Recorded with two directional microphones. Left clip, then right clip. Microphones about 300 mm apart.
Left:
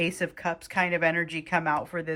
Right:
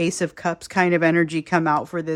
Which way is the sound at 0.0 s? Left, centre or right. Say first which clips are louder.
Right 5 dB; centre.